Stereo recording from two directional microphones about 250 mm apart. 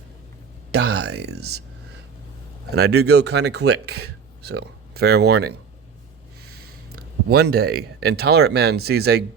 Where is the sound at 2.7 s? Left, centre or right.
Right.